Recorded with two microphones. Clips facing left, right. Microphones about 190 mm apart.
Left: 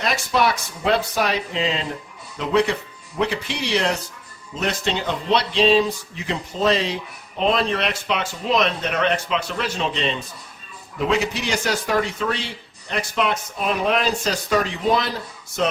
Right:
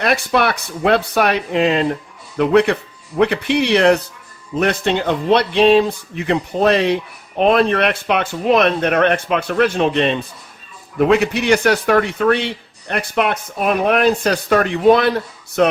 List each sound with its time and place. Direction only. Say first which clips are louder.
0.0 s speech: right 4 dB; 60° right (ahead or behind)